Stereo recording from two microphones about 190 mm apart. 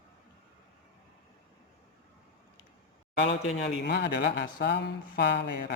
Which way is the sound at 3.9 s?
60° left (ahead or behind).